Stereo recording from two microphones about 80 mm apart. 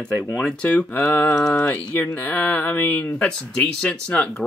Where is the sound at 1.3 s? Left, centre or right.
Centre.